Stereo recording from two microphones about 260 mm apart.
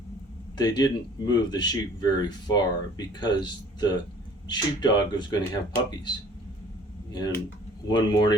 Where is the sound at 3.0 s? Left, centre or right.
Centre.